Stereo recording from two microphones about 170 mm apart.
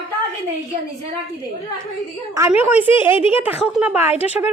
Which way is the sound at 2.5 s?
10° right (ahead or behind).